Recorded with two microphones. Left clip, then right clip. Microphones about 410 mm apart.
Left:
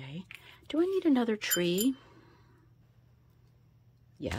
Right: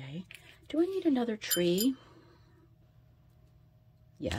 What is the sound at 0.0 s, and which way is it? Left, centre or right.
Speech, centre.